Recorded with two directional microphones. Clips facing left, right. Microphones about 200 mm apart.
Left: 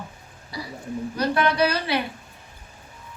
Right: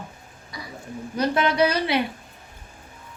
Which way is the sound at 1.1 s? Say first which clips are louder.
Right 1 dB; 20° right (ahead or behind).